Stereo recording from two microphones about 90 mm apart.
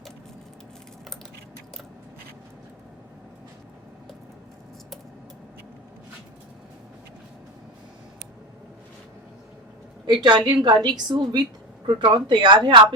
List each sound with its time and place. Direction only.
10.1 s a woman's voice: 50° right (ahead or behind)